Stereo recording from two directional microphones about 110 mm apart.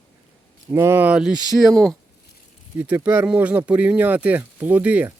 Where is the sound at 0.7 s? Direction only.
25° right (ahead or behind); by 1.4 s 5° right (ahead or behind).